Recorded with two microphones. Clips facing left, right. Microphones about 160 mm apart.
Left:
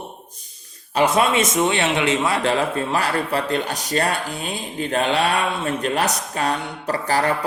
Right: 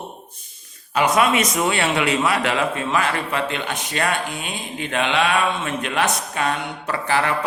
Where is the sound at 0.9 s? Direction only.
30° left (ahead or behind).